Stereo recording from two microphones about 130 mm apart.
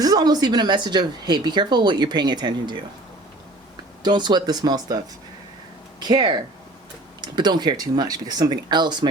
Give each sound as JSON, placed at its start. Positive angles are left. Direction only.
{"t": 0.0, "sound": "speech", "side_deg": -30}
{"t": 4.0, "sound": "speech", "side_deg": -35}
{"t": 6.0, "sound": "speech", "side_deg": -35}